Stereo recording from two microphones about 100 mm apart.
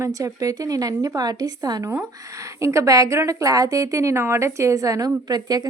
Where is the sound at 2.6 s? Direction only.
30° right (ahead or behind).